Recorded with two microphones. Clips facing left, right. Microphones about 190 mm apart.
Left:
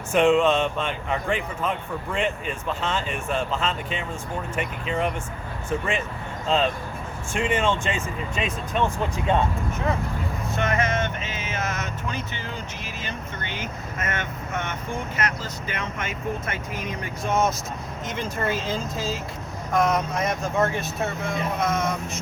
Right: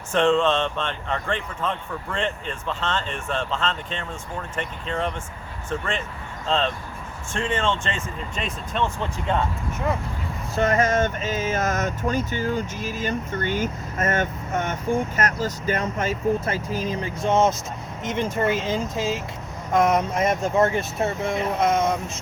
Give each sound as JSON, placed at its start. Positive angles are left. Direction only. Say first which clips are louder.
{"t": 0.1, "sound": "speech", "louder": "left 1 dB", "side_deg": 10}
{"t": 6.5, "sound": "speech", "louder": "left 1 dB", "side_deg": 5}
{"t": 10.5, "sound": "speech", "louder": "right 5 dB", "side_deg": -40}